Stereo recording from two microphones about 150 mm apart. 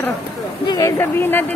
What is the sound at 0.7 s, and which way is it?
Speech, 20° left (ahead or behind).